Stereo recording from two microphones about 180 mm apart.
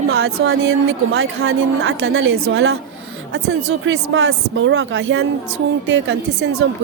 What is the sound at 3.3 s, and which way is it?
A woman's voice, 90° right.